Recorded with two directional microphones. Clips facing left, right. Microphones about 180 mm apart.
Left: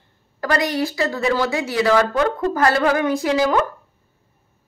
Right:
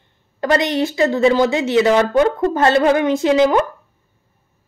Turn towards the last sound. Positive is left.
turn(degrees=-20)  # may be behind; listen again after turning